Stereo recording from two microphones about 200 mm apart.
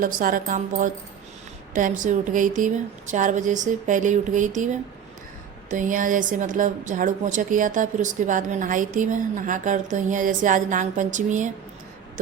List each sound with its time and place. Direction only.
0.0 s speech: 45° right (ahead or behind)
5.7 s speech: 40° right (ahead or behind)